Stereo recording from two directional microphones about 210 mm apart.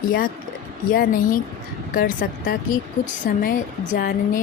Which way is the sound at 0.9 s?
45° left (ahead or behind).